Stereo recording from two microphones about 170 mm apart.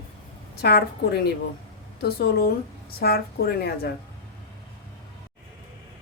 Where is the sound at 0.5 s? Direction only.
70° left (ahead or behind).